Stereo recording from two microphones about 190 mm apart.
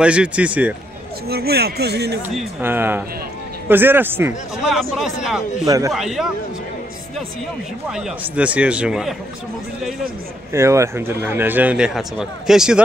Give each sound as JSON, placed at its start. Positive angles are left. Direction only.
{"t": 0.0, "sound": "speech", "side_deg": -5}
{"t": 1.3, "sound": "speech", "side_deg": -55}
{"t": 2.6, "sound": "speech", "side_deg": -10}
{"t": 4.6, "sound": "speech", "side_deg": 0}
{"t": 5.7, "sound": "speech", "side_deg": -15}
{"t": 5.9, "sound": "speech", "side_deg": 0}
{"t": 7.9, "sound": "speech", "side_deg": -5}
{"t": 10.5, "sound": "speech", "side_deg": -15}